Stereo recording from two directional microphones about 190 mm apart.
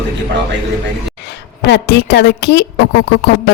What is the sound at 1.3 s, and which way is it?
A woman's voice, 65° left (ahead or behind).